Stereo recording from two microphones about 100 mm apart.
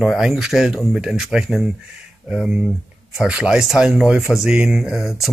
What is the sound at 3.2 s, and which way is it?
Speech, 10° right (ahead or behind).